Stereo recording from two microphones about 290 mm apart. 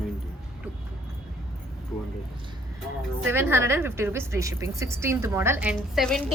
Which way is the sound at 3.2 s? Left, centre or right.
Centre.